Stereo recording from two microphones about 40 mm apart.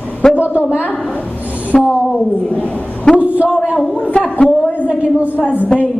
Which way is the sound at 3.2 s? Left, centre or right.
Right.